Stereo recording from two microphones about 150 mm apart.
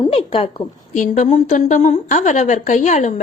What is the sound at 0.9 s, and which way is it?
A woman's voice, 60° left (ahead or behind).